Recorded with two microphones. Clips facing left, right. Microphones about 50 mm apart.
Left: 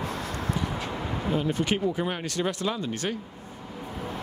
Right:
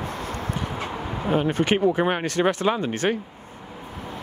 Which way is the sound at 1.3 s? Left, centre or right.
Right.